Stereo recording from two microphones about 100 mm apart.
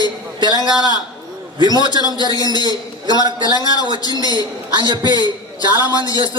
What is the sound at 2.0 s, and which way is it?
Speech, 45° left (ahead or behind).